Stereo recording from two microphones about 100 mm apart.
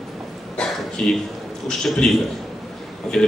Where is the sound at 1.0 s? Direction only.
5° left (ahead or behind).